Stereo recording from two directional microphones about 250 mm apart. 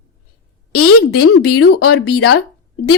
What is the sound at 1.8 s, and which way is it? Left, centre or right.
Speech, left.